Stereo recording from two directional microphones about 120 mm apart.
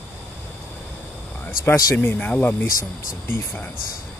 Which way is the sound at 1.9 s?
15° left (ahead or behind).